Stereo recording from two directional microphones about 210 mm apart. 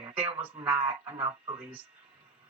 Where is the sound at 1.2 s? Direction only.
10° right (ahead or behind).